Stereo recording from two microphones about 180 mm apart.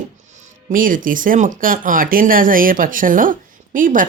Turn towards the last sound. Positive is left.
turn(degrees=-50)  # may be behind; listen again after turning